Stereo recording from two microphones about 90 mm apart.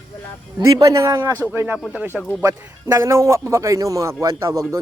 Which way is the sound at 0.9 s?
40° right (ahead or behind).